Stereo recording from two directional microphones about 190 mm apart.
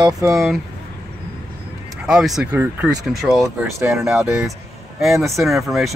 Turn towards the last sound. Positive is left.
turn(degrees=0)  # may be behind; listen again after turning